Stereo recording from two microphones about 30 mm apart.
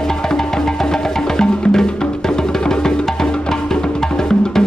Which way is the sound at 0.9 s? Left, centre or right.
Left.